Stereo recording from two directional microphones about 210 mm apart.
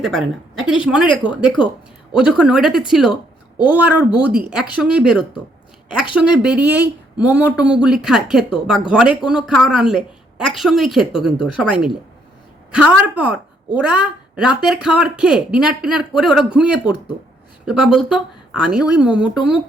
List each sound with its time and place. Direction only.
0.0 s a woman's voice: centre (ahead or behind)
1.6 s speech: 20° left (ahead or behind)
2.1 s a woman's voice: 5° right (ahead or behind)